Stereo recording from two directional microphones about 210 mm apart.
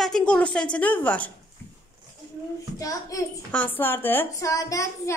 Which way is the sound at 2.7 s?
15° left (ahead or behind).